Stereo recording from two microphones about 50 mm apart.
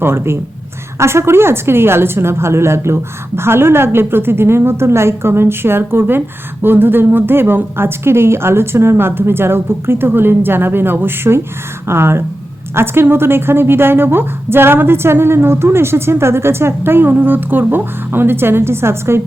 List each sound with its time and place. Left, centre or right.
0.0 s a woman's voice: right
0.9 s a woman's voice: right